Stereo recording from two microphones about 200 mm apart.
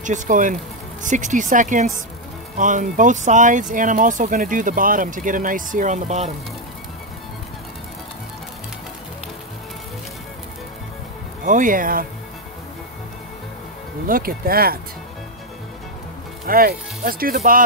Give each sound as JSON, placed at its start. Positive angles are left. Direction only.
{"t": 0.0, "sound": "speech", "side_deg": -40}
{"t": 11.4, "sound": "speech", "side_deg": -40}
{"t": 14.0, "sound": "speech", "side_deg": -45}
{"t": 16.4, "sound": "speech", "side_deg": -45}